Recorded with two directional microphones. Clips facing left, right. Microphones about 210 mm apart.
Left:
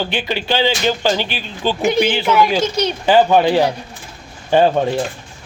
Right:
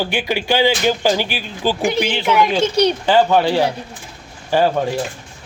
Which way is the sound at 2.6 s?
35° right (ahead or behind).